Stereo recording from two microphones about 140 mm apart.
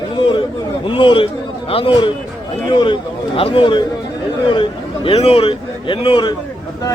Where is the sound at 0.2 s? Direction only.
35° left (ahead or behind).